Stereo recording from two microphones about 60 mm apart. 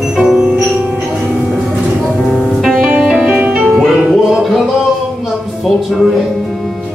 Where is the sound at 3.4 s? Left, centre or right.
Right.